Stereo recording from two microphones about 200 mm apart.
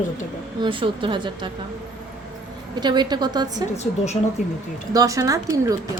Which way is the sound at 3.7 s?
35° left (ahead or behind).